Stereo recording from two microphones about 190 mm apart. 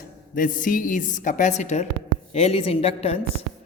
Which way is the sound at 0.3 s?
45° left (ahead or behind).